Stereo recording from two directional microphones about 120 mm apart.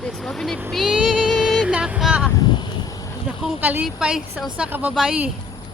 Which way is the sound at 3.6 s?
10° right (ahead or behind).